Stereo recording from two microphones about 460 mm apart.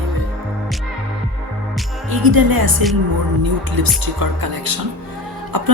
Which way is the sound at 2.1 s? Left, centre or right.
Right.